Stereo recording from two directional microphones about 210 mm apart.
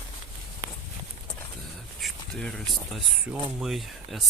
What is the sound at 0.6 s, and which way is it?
Walk, 15° right (ahead or behind).